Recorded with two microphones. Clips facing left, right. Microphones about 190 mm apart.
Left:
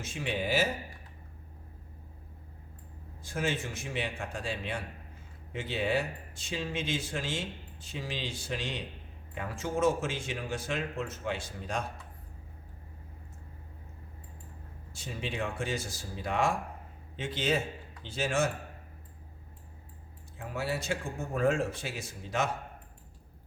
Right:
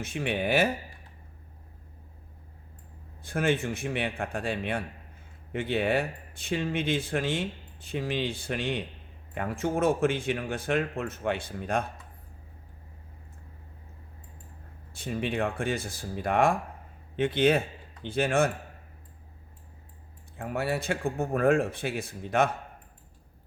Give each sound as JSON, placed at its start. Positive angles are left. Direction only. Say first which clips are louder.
{"t": 0.0, "sound": "speech", "louder": "right 4 dB", "side_deg": -60}
{"t": 3.2, "sound": "speech", "louder": "right 6 dB", "side_deg": -60}
{"t": 14.9, "sound": "speech", "louder": "right 7 dB", "side_deg": -55}
{"t": 20.3, "sound": "speech", "louder": "right 5 dB", "side_deg": -55}